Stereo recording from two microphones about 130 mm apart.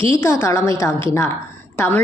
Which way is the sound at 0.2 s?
20° left (ahead or behind).